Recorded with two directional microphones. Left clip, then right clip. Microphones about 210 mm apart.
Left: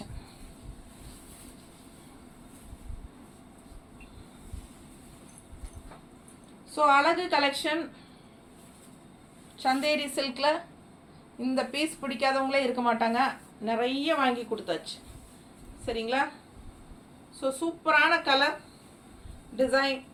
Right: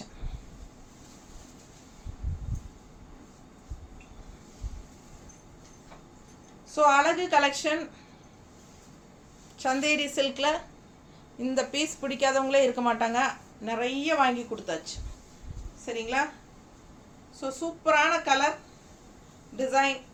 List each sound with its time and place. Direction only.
6.7 s a woman's voice: 10° right (ahead or behind)
9.6 s a woman's voice: 15° right (ahead or behind)
15.9 s a woman's voice: 10° right (ahead or behind)
17.4 s a woman's voice: 10° right (ahead or behind)
19.5 s a woman's voice: 10° right (ahead or behind)